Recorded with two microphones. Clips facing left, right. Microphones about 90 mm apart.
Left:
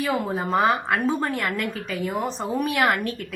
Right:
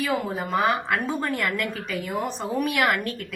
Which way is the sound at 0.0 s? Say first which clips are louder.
Left 1 dB; 25° left (ahead or behind).